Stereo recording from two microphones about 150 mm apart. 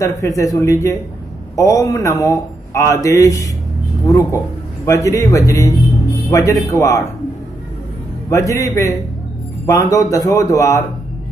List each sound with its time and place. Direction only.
0.0 s speech: 20° left (ahead or behind)
8.3 s speech: 20° left (ahead or behind)